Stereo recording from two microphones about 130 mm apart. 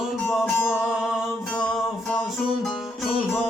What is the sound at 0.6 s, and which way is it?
Music, 20° left (ahead or behind).